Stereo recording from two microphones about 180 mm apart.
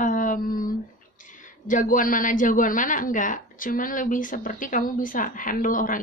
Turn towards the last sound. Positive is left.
turn(degrees=50)  # may be behind; listen again after turning